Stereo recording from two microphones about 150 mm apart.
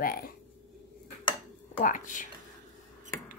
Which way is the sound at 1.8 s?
60° left (ahead or behind).